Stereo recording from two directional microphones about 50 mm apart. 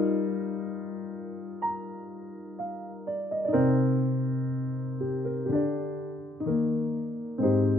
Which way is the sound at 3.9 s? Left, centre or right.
Right.